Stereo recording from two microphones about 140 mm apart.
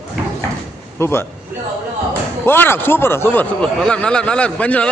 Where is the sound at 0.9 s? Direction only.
20° left (ahead or behind).